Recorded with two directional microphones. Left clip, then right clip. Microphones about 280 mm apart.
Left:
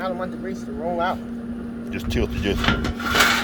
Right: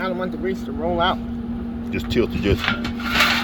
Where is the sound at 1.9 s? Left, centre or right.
Centre.